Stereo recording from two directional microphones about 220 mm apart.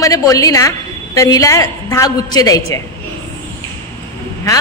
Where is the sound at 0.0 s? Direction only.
15° left (ahead or behind).